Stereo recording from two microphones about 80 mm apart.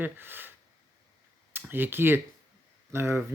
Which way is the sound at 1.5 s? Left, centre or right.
Right.